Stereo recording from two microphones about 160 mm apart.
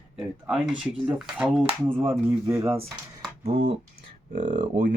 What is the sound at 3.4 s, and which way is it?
Speech, 40° right (ahead or behind).